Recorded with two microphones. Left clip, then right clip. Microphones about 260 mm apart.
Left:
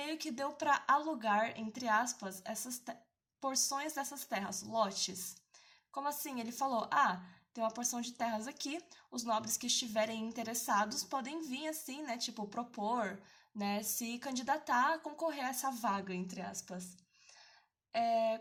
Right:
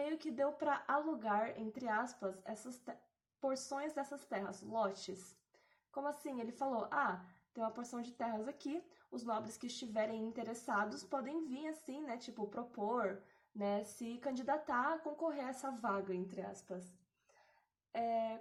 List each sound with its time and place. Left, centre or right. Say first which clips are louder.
0.0 s a woman's voice: right 1 dB; left
5.9 s a woman's voice: left 3 dB; left
17.9 s a woman's voice: left 6 dB; left